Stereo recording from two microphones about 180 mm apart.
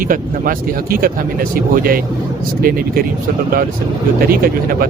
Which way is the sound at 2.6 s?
55° right (ahead or behind).